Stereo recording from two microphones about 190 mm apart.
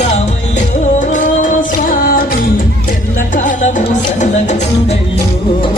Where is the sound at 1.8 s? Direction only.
50° left (ahead or behind).